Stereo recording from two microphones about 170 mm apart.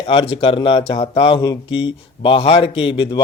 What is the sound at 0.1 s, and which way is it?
Speech, 35° left (ahead or behind).